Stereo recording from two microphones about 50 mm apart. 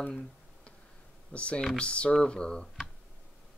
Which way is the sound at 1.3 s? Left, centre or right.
Left.